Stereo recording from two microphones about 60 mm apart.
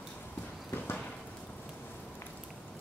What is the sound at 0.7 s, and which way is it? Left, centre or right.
Clip-clop, left.